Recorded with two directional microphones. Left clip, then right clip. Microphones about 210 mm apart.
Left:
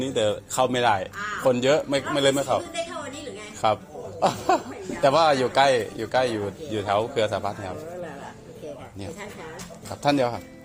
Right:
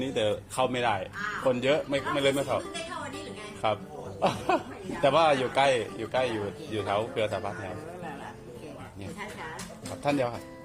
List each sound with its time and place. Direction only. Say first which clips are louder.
0.0 s a man's voice: left 4 dB; 25° left (ahead or behind)
3.6 s a man's voice: left 6 dB; 30° left (ahead or behind)
10.0 s a man's voice: left 6 dB; 30° left (ahead or behind)